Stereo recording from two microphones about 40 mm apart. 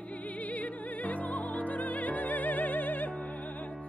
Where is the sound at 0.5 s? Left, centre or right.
Left.